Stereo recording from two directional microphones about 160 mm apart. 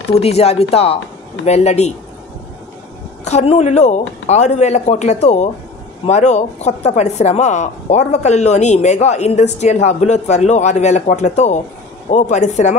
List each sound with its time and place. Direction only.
0.2 s speech: 40° left (ahead or behind)
3.3 s speech: 45° left (ahead or behind)